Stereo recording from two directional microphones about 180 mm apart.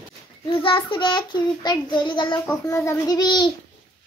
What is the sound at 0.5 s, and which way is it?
Child singing, 30° left (ahead or behind).